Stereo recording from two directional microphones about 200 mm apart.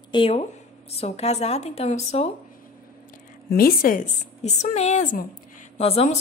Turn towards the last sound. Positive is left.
turn(degrees=30)  # may be behind; listen again after turning